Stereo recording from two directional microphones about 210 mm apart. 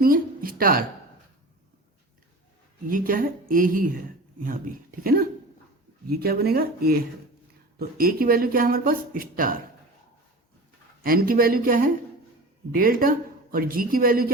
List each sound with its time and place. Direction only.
0.0 s a sound: 45° right (ahead or behind)
2.8 s speech: 40° right (ahead or behind)
11.0 s speech: 45° right (ahead or behind)